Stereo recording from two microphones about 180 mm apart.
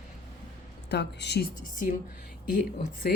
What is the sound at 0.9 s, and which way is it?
Speech, 70° left (ahead or behind).